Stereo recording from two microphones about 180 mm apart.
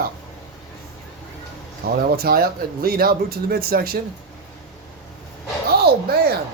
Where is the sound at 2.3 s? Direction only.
55° right (ahead or behind).